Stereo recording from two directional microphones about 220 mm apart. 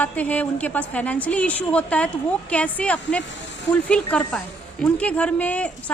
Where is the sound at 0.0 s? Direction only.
5° left (ahead or behind).